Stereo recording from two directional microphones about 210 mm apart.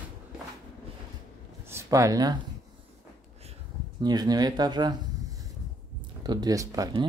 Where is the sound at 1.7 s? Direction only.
15° right (ahead or behind).